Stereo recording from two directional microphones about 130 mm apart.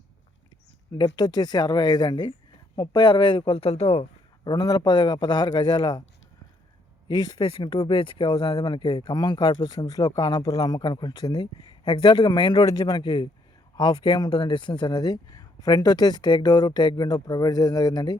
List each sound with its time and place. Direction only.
0.9 s speech: 35° left (ahead or behind); by 4.0 s 50° left (ahead or behind)
4.4 s speech: 30° left (ahead or behind)
7.1 s speech: 35° left (ahead or behind)